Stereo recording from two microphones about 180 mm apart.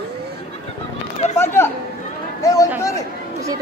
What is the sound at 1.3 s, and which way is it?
Speech, 15° left (ahead or behind).